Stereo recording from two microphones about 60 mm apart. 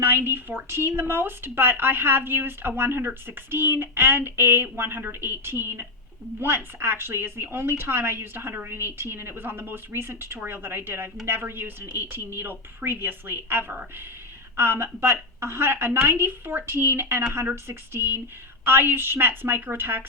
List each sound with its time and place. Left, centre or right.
0.0 s a woman's voice: right